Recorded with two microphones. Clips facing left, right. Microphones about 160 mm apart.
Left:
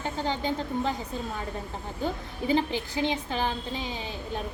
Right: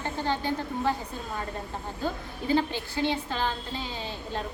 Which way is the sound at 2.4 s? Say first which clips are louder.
Even; 15° left (ahead or behind).